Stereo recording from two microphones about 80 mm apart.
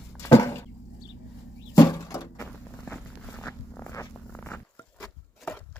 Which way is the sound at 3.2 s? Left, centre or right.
Left.